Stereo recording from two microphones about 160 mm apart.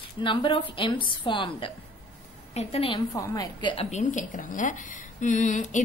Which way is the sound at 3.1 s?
20° left (ahead or behind).